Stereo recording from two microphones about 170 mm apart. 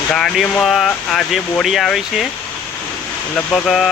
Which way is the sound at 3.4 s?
5° left (ahead or behind).